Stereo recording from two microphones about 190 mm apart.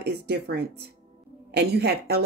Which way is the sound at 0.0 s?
60° right (ahead or behind).